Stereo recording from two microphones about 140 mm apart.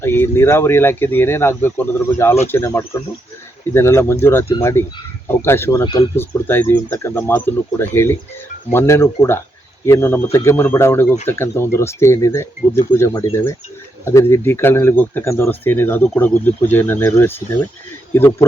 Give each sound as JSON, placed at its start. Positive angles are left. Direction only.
{"t": 0.0, "sound": "speech", "side_deg": 15}
{"t": 5.8, "sound": "speech", "side_deg": 40}
{"t": 6.1, "sound": "speech", "side_deg": 15}
{"t": 14.0, "sound": "speech", "side_deg": 20}